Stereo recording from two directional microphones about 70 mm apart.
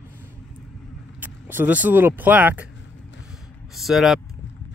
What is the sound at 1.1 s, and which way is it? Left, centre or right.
Speech, right.